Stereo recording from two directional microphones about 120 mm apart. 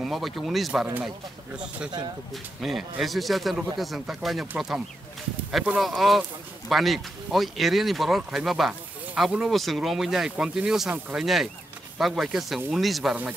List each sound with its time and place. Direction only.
0.0 s speech: centre (ahead or behind)
2.3 s speech: centre (ahead or behind)